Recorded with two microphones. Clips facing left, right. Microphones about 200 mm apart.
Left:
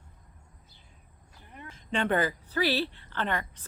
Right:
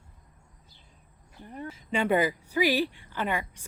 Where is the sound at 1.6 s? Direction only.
10° right (ahead or behind).